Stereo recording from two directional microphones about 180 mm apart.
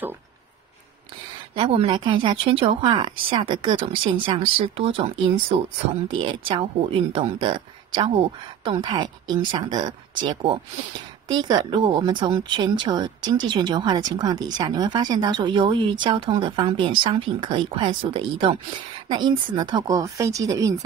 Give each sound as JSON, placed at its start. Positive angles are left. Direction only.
{"t": 1.5, "sound": "speech", "side_deg": -30}